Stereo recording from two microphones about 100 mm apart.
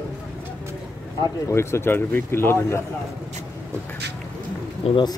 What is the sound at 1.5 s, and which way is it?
Speech, 25° left (ahead or behind).